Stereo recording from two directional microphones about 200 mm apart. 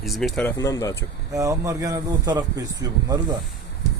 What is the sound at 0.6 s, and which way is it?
Speech, 15° left (ahead or behind).